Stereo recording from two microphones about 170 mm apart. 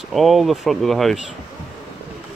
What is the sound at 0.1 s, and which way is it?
Speech, centre (ahead or behind).